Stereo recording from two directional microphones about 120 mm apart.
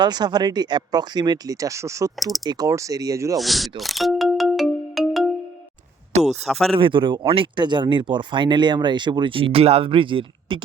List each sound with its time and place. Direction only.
0.0 s speech: 35° right (ahead or behind)
3.3 s music: centre (ahead or behind)
6.2 s speech: centre (ahead or behind)
6.7 s speech: 45° right (ahead or behind)